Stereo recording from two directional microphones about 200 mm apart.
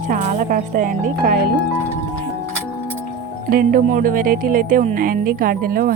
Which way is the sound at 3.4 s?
45° right (ahead or behind).